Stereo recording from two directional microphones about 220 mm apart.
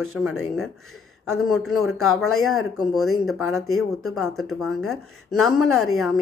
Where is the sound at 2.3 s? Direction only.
75° left (ahead or behind).